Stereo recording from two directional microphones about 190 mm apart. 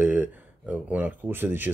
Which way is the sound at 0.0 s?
10° right (ahead or behind).